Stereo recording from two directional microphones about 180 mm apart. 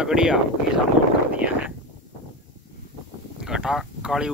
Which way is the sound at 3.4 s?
5° right (ahead or behind).